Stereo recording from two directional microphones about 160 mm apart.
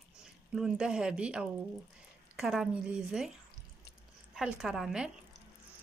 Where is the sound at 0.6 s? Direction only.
5° right (ahead or behind).